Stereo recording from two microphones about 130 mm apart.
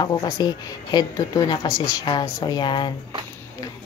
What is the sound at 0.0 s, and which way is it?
A woman's voice, 30° left (ahead or behind).